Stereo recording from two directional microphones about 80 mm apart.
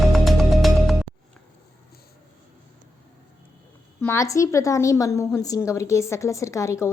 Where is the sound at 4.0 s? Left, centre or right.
Left.